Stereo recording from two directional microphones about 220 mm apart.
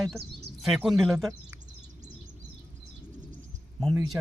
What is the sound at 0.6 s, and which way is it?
Speech, centre (ahead or behind).